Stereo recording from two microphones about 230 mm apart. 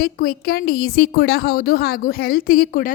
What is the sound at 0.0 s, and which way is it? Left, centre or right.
A woman's voice, left.